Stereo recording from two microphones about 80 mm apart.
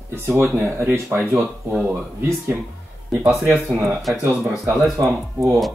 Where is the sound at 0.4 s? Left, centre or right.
Right.